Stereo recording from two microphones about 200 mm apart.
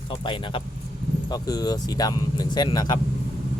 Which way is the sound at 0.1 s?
25° left (ahead or behind).